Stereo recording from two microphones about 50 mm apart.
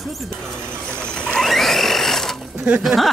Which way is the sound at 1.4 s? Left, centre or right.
Centre.